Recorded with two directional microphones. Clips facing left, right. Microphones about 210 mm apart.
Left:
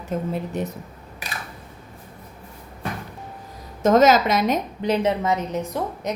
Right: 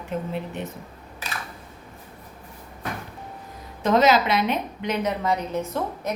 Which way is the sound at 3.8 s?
45° left (ahead or behind).